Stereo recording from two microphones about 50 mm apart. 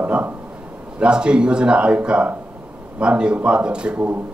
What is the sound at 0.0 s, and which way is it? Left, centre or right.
Speech, right.